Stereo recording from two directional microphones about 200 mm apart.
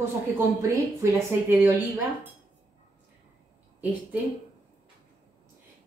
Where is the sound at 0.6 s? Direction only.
15° right (ahead or behind).